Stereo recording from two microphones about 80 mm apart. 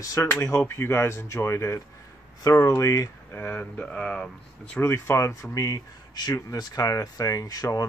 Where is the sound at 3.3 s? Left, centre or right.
Left; by 4.8 s centre.